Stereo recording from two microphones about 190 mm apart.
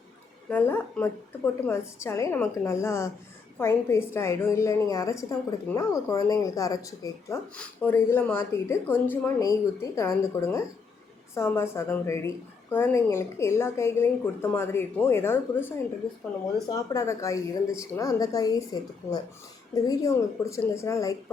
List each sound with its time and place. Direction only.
0.5 s a woman's voice: 10° left (ahead or behind)
16.9 s a woman's voice: 15° left (ahead or behind)